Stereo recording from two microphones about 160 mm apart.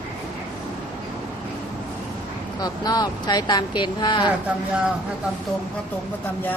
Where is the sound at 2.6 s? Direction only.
25° left (ahead or behind).